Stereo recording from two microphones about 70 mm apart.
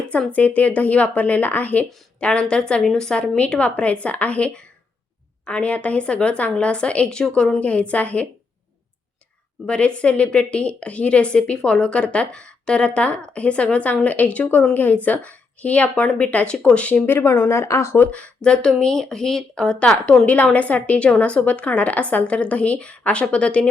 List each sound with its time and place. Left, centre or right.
0.3 s a woman's voice: left
9.6 s a woman's voice: centre; by 18.0 s left
18.0 s a woman's voice: centre
20.2 s speech: centre